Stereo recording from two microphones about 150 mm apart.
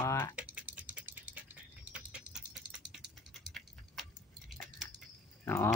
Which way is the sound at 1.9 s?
5° right (ahead or behind).